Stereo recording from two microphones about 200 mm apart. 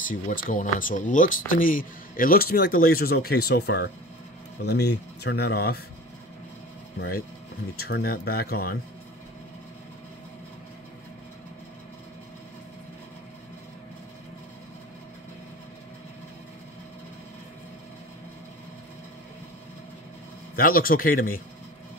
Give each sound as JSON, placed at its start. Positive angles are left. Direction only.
{"t": 0.1, "sound": "speech", "side_deg": 45}
{"t": 7.0, "sound": "speech", "side_deg": 45}
{"t": 20.5, "sound": "speech", "side_deg": 45}